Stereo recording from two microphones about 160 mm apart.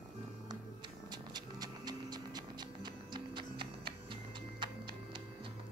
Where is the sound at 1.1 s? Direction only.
25° right (ahead or behind).